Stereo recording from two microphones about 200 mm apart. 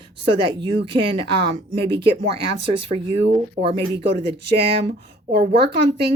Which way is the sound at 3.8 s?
55° right (ahead or behind).